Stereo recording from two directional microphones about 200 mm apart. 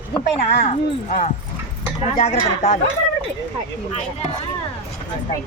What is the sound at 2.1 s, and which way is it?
Speech, 30° left (ahead or behind).